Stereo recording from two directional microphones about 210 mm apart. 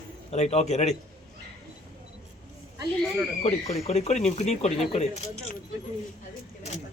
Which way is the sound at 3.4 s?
30° left (ahead or behind).